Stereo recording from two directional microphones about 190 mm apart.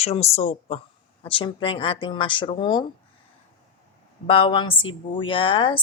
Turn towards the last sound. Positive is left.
turn(degrees=25)  # may be behind; listen again after turning